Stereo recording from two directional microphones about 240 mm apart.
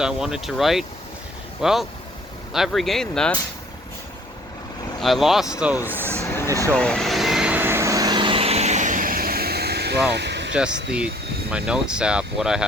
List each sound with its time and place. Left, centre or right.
0.0 s speech: centre
4.9 s speech: centre
6.7 s vehicle: centre; by 10.5 s right
11.5 s speech: centre